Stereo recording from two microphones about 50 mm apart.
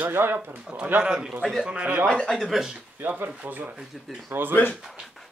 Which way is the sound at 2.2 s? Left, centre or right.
Centre.